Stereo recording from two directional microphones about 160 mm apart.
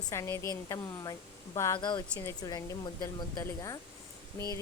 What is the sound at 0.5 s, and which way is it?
A woman's voice, 20° left (ahead or behind).